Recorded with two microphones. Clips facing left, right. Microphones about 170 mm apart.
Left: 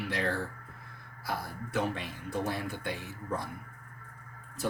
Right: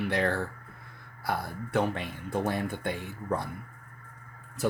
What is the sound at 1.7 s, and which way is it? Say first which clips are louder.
Speech: right 4 dB; 55° right (ahead or behind).